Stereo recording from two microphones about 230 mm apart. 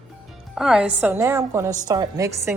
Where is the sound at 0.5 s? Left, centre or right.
Centre.